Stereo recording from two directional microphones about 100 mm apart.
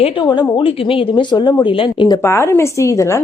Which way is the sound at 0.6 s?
65° left (ahead or behind).